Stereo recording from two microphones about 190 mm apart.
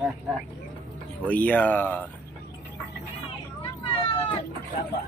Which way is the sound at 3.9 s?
30° left (ahead or behind).